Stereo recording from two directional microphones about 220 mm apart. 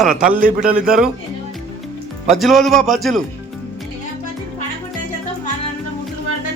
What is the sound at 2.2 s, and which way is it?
Speech, centre (ahead or behind).